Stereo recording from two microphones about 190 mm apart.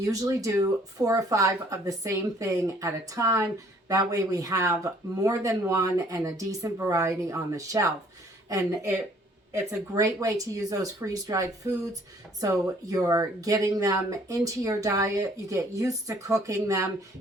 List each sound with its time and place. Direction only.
0.0 s speech: 15° right (ahead or behind)